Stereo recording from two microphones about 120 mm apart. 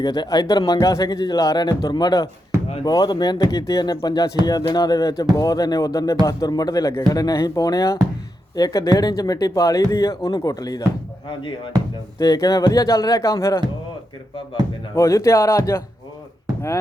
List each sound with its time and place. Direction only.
0.0 s speech: 35° left (ahead or behind)
11.3 s speech: 45° left (ahead or behind)
12.2 s speech: 30° left (ahead or behind)
14.9 s speech: 25° left (ahead or behind)